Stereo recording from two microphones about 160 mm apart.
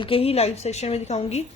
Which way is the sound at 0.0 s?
35° left (ahead or behind).